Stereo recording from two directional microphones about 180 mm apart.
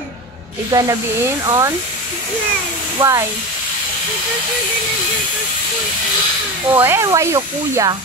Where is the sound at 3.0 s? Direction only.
20° right (ahead or behind).